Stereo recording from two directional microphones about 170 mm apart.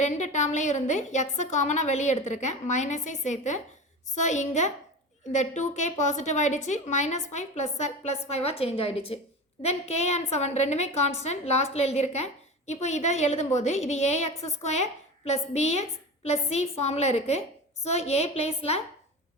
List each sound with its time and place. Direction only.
0.0 s a woman's voice: 45° left (ahead or behind)